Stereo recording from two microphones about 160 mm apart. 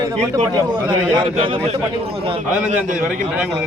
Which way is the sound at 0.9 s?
30° right (ahead or behind).